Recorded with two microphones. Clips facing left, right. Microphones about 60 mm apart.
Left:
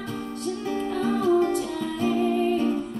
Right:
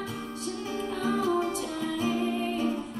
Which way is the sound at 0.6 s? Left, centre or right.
Left.